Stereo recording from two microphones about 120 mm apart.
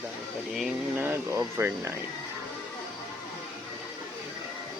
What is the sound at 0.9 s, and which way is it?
Speech, 10° right (ahead or behind).